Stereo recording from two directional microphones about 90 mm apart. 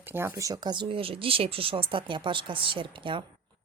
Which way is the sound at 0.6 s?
60° right (ahead or behind).